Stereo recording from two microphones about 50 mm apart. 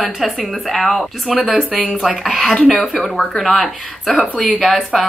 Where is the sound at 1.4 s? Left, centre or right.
Centre.